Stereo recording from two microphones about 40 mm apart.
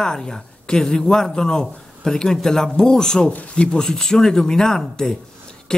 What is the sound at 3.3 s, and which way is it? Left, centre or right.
Speech, left.